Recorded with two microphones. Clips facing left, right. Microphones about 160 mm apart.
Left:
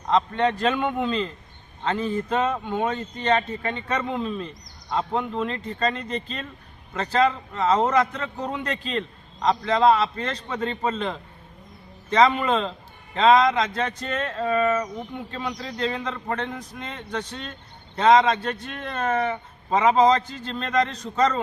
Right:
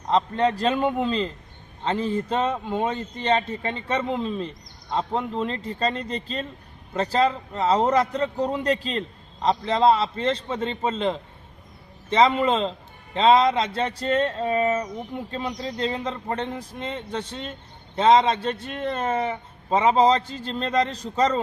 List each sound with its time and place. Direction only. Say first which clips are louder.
0.3 s a man's voice: right 1 dB; 35° right (ahead or behind)